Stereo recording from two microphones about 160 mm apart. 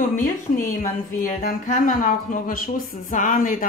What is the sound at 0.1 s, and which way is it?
Speech, 55° left (ahead or behind).